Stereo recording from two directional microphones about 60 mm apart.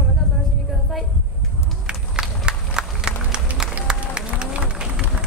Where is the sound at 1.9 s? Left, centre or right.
Centre.